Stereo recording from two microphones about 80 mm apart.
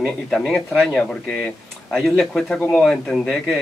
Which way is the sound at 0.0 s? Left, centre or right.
Centre.